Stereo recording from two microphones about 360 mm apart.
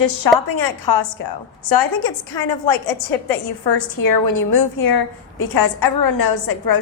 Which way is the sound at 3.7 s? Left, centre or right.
Left.